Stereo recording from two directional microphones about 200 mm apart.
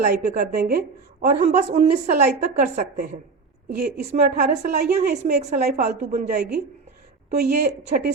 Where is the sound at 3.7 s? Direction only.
55° right (ahead or behind); by 6.2 s 35° right (ahead or behind).